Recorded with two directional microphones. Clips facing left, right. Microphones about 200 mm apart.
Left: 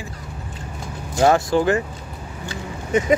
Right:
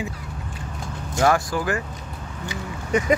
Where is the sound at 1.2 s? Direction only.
25° left (ahead or behind).